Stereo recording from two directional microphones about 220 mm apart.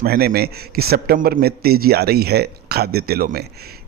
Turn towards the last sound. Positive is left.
turn(degrees=-45)  # may be behind; listen again after turning